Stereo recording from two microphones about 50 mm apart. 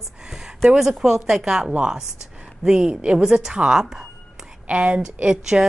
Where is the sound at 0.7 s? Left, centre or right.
Centre.